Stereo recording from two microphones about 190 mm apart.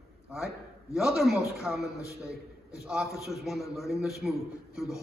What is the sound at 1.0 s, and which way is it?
Speech, centre (ahead or behind).